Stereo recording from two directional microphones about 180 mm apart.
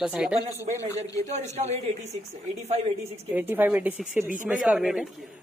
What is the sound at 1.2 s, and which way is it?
Speech, 35° right (ahead or behind).